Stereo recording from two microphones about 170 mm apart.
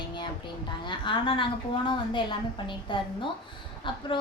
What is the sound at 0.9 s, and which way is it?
Speech, 30° left (ahead or behind).